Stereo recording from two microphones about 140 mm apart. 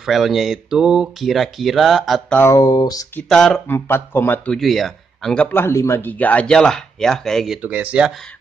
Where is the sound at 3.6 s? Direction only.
15° left (ahead or behind).